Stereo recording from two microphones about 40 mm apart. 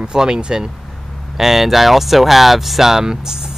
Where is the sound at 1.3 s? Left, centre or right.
Centre.